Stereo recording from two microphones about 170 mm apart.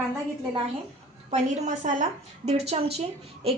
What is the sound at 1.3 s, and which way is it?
A woman's voice, 45° right (ahead or behind).